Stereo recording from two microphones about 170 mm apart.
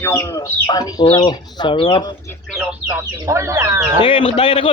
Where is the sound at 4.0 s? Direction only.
30° left (ahead or behind).